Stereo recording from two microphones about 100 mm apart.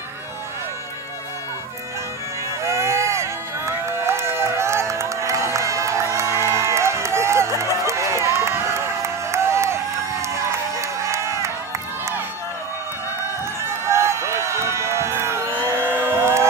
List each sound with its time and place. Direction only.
2.6 s run: 30° right (ahead or behind)
10.8 s crowd: 30° right (ahead or behind)
13.8 s run: 30° right (ahead or behind)
15.9 s music: 25° right (ahead or behind)